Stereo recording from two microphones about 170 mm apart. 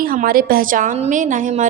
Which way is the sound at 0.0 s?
60° right (ahead or behind).